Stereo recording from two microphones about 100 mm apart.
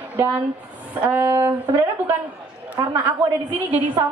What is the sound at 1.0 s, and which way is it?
Speech, 25° right (ahead or behind).